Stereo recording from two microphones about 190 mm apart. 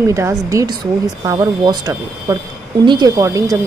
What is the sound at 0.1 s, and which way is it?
A woman's voice, 15° right (ahead or behind).